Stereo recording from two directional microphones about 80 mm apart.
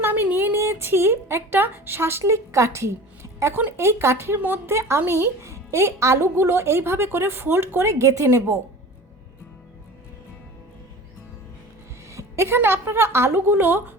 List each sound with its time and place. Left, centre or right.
0.0 s a woman's voice: right
12.1 s a woman's voice: right